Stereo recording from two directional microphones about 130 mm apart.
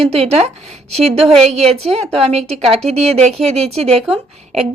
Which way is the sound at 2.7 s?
55° right (ahead or behind).